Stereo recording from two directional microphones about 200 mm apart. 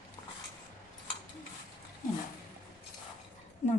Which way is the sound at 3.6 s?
35° left (ahead or behind).